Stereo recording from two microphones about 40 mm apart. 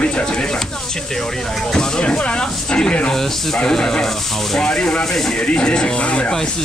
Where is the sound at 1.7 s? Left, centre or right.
Centre.